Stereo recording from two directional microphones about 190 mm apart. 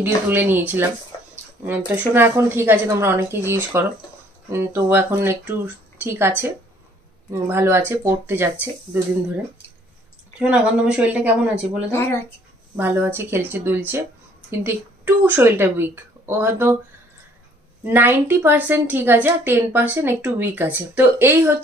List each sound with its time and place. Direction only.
0.0 s a woman's voice: 10° right (ahead or behind)
1.9 s a woman's voice: 10° right (ahead or behind)
10.4 s a woman's voice: 5° right (ahead or behind)
17.8 s a woman's voice: 10° right (ahead or behind)